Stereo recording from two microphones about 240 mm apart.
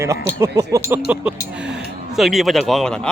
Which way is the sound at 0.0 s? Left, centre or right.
Centre.